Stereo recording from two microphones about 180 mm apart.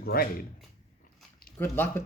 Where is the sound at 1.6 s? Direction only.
10° left (ahead or behind).